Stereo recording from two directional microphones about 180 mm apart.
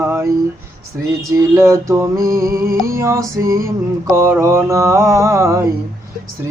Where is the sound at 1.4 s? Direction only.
15° right (ahead or behind).